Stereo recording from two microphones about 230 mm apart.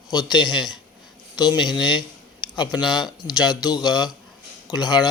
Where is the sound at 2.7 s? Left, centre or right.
Centre.